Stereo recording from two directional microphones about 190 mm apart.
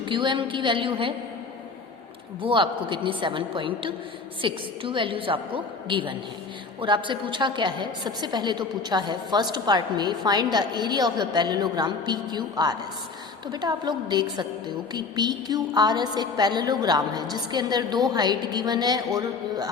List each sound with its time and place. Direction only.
0.0 s a woman's voice: 25° right (ahead or behind)
2.5 s a woman's voice: 25° right (ahead or behind)